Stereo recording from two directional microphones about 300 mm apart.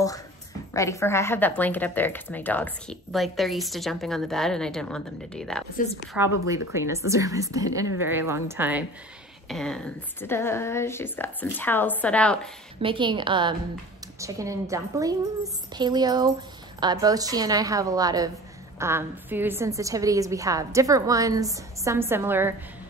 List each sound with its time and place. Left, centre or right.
0.7 s speech: centre
6.7 s a woman's voice: centre
12.8 s a woman's voice: centre